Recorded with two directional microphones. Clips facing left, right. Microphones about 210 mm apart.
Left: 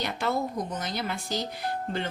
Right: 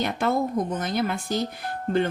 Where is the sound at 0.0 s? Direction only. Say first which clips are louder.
Right 5 dB; 50° right (ahead or behind).